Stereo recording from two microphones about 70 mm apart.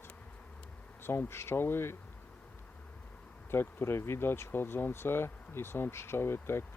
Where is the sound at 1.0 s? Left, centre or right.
Left.